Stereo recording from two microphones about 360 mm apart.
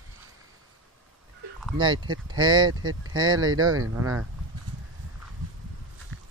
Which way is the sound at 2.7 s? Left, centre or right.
Right.